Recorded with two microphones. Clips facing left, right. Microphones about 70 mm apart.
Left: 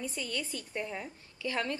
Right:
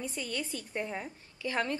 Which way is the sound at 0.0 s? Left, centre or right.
Centre.